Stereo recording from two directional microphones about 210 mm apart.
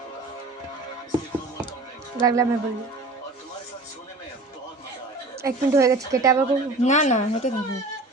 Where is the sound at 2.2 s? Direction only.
15° right (ahead or behind).